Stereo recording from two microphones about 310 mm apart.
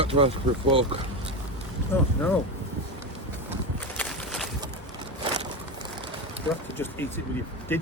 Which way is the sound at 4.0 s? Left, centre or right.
Centre.